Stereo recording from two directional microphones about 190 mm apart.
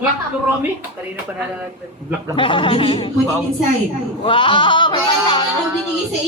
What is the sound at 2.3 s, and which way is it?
Speech, 25° left (ahead or behind).